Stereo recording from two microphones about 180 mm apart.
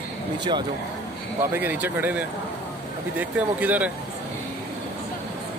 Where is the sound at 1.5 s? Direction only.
10° right (ahead or behind).